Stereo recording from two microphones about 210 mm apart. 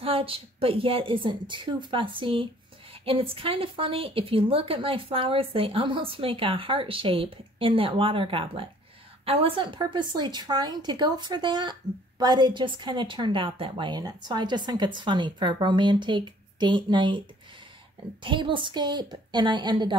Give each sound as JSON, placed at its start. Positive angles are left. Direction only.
{"t": 0.0, "sound": "a woman's voice", "side_deg": -25}
{"t": 18.2, "sound": "a woman's voice", "side_deg": -25}